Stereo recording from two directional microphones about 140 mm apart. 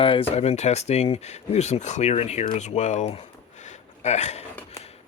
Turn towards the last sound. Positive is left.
turn(degrees=55)  # may be behind; listen again after turning